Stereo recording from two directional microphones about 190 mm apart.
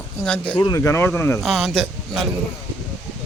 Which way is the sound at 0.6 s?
15° left (ahead or behind).